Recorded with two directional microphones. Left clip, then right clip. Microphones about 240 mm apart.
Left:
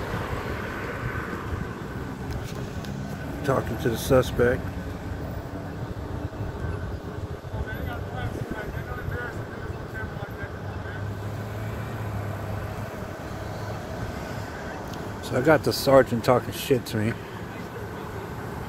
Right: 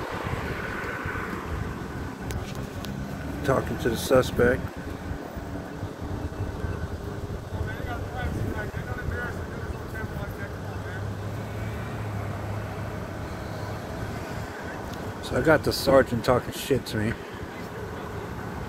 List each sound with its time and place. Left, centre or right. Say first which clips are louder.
0.1 s vehicle: even; left
3.4 s speech: even; centre
15.3 s speech: left 1 dB; centre